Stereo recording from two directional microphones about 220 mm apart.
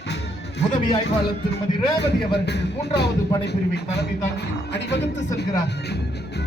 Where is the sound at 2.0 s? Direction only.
50° left (ahead or behind).